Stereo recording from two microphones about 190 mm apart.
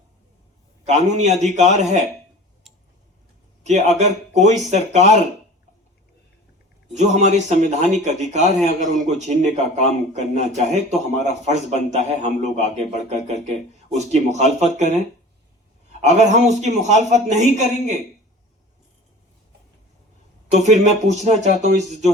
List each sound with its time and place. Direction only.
0.9 s a man's voice: 35° right (ahead or behind)
2.7 s tick-tock: centre (ahead or behind)
3.6 s a man's voice: 40° right (ahead or behind)
6.9 s a man's voice: 40° right (ahead or behind)
16.0 s a man's voice: 35° right (ahead or behind)
20.5 s a man's voice: 35° right (ahead or behind)